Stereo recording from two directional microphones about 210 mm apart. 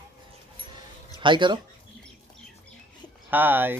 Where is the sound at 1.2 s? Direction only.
20° right (ahead or behind).